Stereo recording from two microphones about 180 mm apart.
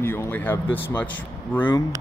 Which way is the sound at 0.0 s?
15° left (ahead or behind).